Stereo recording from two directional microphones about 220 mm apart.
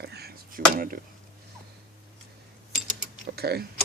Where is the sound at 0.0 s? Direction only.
45° right (ahead or behind).